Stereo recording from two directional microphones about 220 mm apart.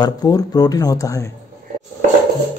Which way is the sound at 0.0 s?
15° left (ahead or behind).